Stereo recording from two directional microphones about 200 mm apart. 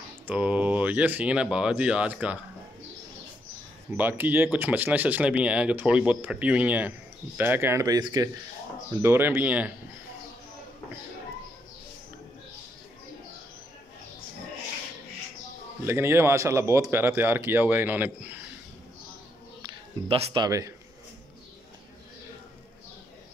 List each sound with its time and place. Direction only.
0.3 s speech: 5° right (ahead or behind)
3.9 s speech: 10° right (ahead or behind)
15.8 s speech: 10° right (ahead or behind)
19.6 s music: 30° right (ahead or behind)
20.4 s speech: 15° right (ahead or behind)